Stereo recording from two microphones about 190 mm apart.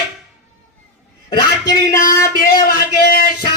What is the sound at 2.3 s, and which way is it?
Speech, 55° left (ahead or behind).